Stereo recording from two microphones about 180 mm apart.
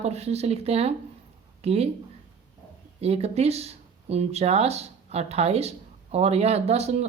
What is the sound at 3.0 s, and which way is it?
A woman's voice, 35° right (ahead or behind).